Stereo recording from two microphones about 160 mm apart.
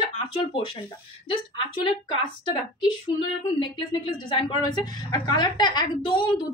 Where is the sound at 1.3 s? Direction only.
30° left (ahead or behind).